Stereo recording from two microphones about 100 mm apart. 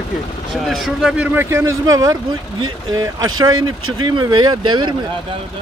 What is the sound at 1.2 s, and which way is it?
Speech, 20° right (ahead or behind).